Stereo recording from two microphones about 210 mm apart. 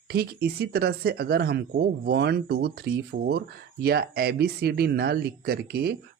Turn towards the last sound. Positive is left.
turn(degrees=-50)  # may be behind; listen again after turning